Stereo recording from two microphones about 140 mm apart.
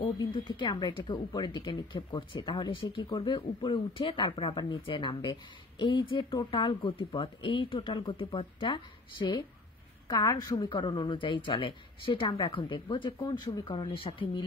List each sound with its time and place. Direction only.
0.2 s speech: 35° left (ahead or behind)